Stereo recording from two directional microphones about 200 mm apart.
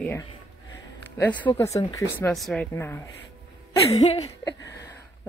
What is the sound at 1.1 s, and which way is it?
Speech, 10° left (ahead or behind).